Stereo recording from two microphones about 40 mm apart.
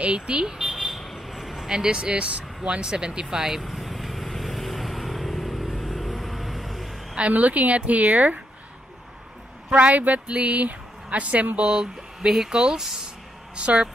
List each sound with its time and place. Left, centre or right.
0.0 s speech: right
0.5 s vehicle: centre
1.1 s a sound: centre
1.7 s vehicle: centre
7.2 s a woman's voice: right
9.7 s a woman's voice: right
10.2 s speech: right
11.6 s speech: right
12.3 s speech: centre
13.6 s speech: right